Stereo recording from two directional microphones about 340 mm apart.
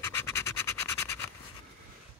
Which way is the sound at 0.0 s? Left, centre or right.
Centre.